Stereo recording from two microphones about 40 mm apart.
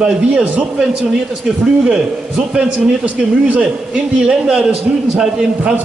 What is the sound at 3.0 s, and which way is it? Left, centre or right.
Speech, right.